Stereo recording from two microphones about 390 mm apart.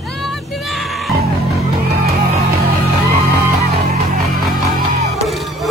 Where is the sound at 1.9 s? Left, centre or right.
Right.